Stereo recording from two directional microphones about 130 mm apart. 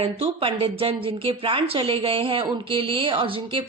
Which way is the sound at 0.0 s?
45° right (ahead or behind).